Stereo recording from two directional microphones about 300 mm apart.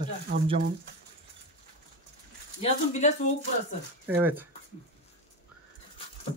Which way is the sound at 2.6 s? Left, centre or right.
Left.